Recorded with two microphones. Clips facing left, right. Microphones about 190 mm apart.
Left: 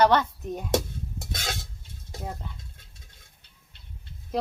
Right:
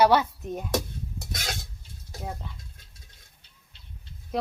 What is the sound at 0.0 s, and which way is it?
Speech, 10° right (ahead or behind).